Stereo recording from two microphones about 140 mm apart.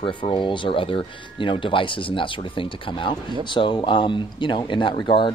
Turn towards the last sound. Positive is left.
turn(degrees=35)  # may be behind; listen again after turning